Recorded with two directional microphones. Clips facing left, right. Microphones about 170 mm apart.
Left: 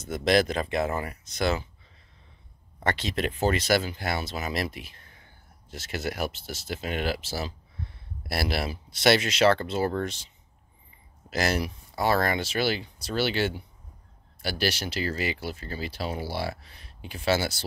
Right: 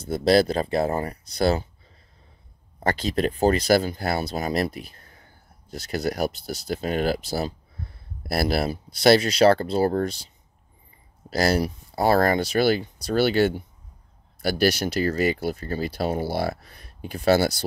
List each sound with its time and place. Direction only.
0.0 s speech: 35° right (ahead or behind)
2.8 s speech: 35° right (ahead or behind)